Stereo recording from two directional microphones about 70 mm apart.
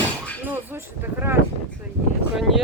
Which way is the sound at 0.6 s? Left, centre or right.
Right.